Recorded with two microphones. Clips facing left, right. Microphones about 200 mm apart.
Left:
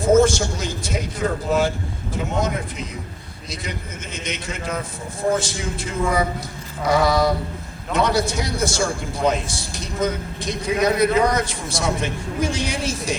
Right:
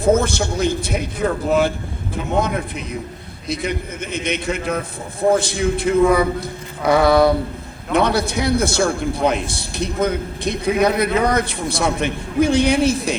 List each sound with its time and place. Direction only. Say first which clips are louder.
0.0 s a man's voice: left 1 dB; 60° right (ahead or behind)